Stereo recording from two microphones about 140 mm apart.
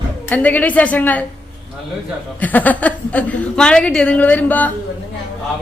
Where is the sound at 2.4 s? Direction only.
10° left (ahead or behind).